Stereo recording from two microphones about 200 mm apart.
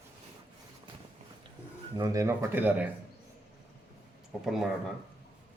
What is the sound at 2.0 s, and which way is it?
Speech, 15° right (ahead or behind).